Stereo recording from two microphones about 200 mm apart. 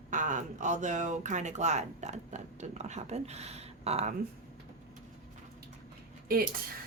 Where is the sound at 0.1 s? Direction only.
40° right (ahead or behind).